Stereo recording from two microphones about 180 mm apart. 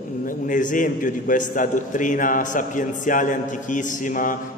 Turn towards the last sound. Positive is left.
turn(degrees=45)  # may be behind; listen again after turning